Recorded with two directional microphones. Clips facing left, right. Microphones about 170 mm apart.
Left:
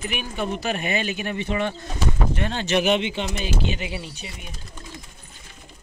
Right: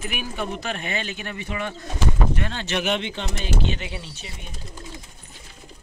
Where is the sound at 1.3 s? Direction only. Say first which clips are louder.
Left 5 dB; 30° left (ahead or behind); by 4.3 s 10° left (ahead or behind).